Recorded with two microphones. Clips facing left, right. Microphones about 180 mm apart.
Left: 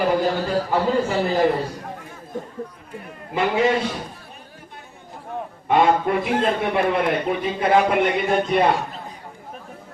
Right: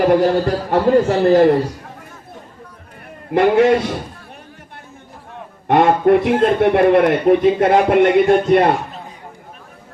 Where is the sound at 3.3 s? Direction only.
70° right (ahead or behind).